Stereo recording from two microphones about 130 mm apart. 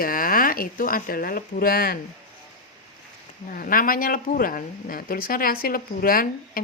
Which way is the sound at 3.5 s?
90° left.